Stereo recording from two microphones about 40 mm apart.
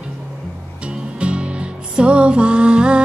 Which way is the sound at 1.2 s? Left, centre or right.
Right.